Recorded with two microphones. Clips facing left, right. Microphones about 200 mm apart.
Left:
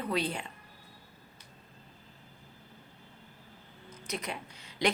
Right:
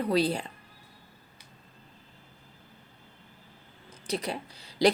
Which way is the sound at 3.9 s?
30° right (ahead or behind).